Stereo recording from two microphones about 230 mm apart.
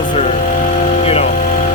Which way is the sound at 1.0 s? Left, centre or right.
Left.